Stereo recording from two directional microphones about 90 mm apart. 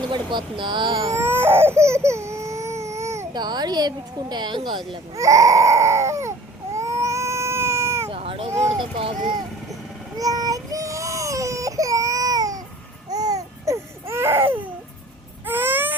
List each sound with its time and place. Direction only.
0.1 s speech: 60° right (ahead or behind)
1.1 s baby cry: 25° right (ahead or behind)
3.3 s speech: 50° right (ahead or behind)
5.1 s baby cry: 35° right (ahead or behind)
6.7 s cat: 35° right (ahead or behind)
8.1 s a sound: 90° right
8.8 s speech: 75° right (ahead or behind)
10.2 s baby cry: 40° right (ahead or behind)
13.1 s babbling: 45° right (ahead or behind)
14.1 s a sound: 30° right (ahead or behind)
15.4 s baby cry: 20° right (ahead or behind)